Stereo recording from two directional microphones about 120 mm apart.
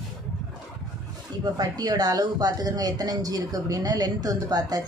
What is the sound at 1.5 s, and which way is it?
Speech, 35° right (ahead or behind).